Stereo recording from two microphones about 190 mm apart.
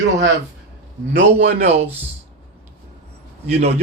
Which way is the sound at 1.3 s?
65° right (ahead or behind).